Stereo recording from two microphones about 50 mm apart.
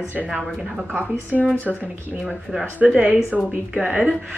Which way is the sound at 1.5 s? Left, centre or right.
Left.